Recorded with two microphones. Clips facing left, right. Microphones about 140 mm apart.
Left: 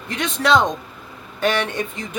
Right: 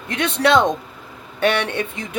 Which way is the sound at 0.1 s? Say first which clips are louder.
Right 2 dB; 60° right (ahead or behind).